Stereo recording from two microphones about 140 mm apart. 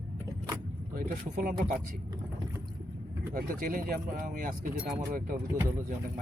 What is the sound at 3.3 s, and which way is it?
Speech, 80° right.